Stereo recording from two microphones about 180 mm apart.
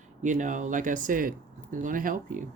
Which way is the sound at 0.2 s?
45° right (ahead or behind).